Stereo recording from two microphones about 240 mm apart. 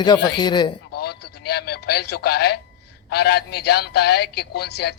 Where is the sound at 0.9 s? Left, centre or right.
Left.